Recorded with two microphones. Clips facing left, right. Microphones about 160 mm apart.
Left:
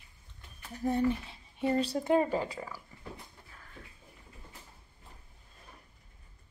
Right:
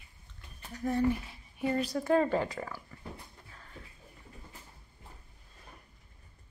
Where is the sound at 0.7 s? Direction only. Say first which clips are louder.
Even; 25° left (ahead or behind).